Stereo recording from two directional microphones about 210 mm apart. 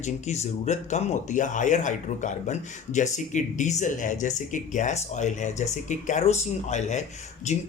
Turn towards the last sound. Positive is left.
turn(degrees=35)  # may be behind; listen again after turning